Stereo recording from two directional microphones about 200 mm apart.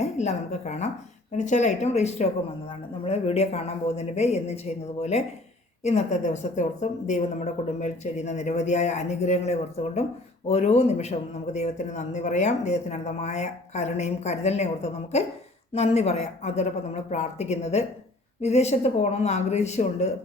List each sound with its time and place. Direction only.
0.0 s a man's voice: 35° left (ahead or behind)